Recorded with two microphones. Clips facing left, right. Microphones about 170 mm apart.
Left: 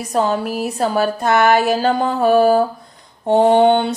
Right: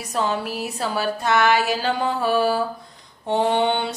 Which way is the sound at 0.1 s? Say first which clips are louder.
Left 6 dB; 45° left (ahead or behind).